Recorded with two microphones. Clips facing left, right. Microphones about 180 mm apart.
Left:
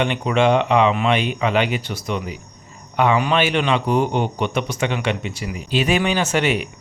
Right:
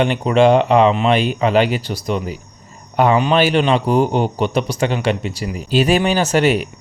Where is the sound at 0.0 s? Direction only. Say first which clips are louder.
Right 5 dB; 35° right (ahead or behind).